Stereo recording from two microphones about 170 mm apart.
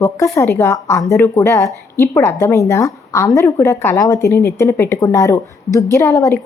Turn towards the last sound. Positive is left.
turn(degrees=15)  # may be behind; listen again after turning